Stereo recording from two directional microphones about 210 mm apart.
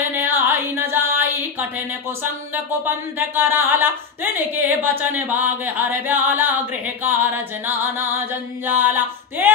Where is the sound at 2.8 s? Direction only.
10° right (ahead or behind).